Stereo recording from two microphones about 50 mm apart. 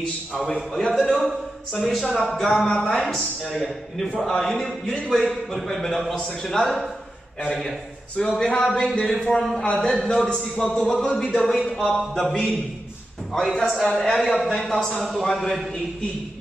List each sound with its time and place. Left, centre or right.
0.7 s a man's voice: centre
1.8 s a man's voice: centre
2.5 s a man's voice: centre